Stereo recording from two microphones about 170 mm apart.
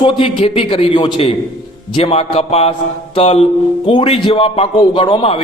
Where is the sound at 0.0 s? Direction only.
30° left (ahead or behind).